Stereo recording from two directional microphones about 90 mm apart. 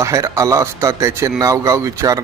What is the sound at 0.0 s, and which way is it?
A man's voice, 35° right (ahead or behind).